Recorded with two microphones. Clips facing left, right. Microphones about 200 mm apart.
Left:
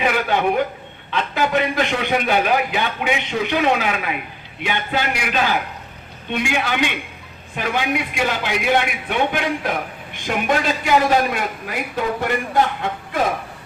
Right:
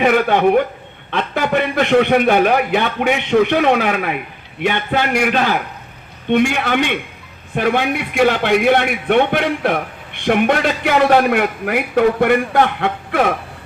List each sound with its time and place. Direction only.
0.0 s a man's voice: 55° right (ahead or behind)